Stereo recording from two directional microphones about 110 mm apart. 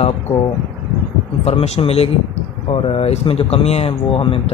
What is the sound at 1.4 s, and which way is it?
Speech, 70° left (ahead or behind).